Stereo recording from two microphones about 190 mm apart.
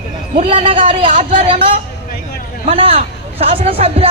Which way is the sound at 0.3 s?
30° right (ahead or behind).